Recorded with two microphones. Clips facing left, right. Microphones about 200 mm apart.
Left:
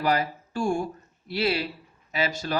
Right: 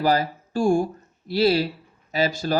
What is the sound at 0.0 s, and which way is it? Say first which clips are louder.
Speech: right 4 dB; 35° right (ahead or behind).